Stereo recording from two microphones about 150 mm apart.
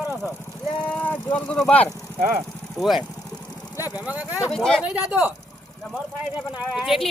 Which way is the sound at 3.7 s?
25° left (ahead or behind).